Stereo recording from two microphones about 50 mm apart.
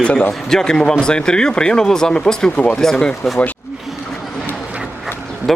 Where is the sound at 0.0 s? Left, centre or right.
Left.